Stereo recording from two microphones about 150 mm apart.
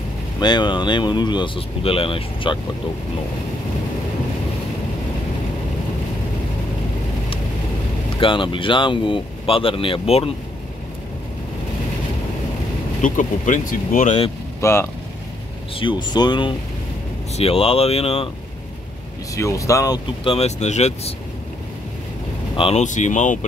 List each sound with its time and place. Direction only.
0.4 s speech: 30° left (ahead or behind)
8.2 s speech: 35° left (ahead or behind)
13.0 s speech: 60° left (ahead or behind)
14.6 s speech: 15° left (ahead or behind)
15.7 s speech: 35° left (ahead or behind)
19.3 s speech: 20° left (ahead or behind)
20.2 s speech: 45° left (ahead or behind)
22.6 s speech: 40° left (ahead or behind)
22.8 s speech: 55° left (ahead or behind)